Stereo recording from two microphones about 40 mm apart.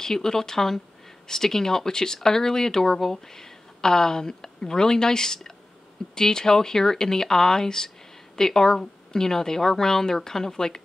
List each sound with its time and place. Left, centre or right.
0.0 s speech: centre